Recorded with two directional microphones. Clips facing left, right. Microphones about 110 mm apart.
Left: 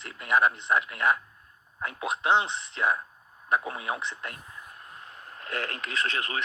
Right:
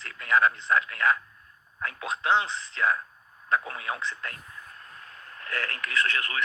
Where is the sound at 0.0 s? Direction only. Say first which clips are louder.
Even; 20° left (ahead or behind).